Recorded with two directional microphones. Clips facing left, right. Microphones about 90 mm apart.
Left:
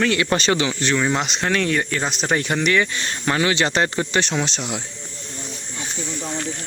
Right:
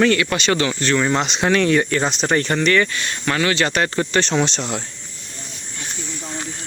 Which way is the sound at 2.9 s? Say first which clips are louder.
Even; 25° left (ahead or behind).